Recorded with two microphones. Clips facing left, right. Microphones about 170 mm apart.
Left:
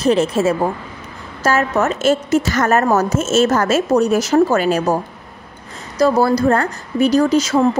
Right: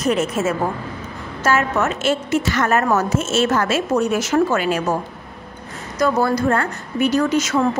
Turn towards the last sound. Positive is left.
turn(degrees=35)  # may be behind; listen again after turning